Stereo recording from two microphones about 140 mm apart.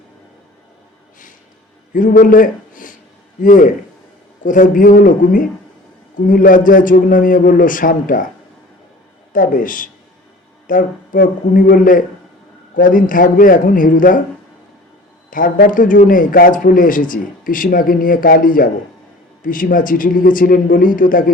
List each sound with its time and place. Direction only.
1.9 s a man's voice: 75° left (ahead or behind)
9.3 s a man's voice: 75° left (ahead or behind)
15.3 s a man's voice: 85° left